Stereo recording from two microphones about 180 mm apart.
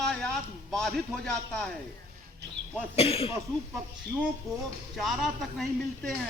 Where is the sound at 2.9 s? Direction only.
30° left (ahead or behind).